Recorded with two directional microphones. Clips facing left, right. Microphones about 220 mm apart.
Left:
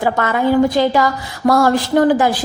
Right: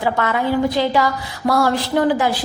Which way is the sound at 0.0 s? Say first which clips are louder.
Left 3 dB; 45° left (ahead or behind).